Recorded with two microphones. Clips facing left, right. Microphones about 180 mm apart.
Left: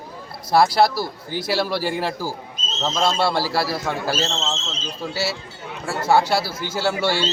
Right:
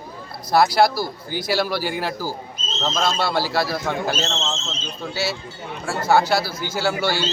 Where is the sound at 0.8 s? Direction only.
25° left (ahead or behind).